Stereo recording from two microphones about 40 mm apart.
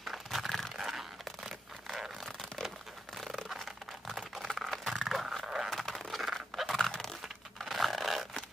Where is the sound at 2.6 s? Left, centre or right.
Centre.